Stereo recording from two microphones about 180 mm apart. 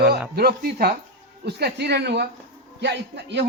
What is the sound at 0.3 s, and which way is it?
A man's voice, 60° right (ahead or behind).